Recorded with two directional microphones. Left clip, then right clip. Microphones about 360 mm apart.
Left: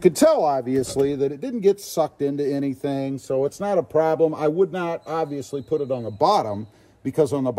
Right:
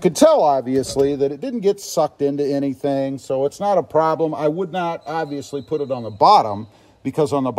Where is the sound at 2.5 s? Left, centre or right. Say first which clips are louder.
Right 5 dB; right.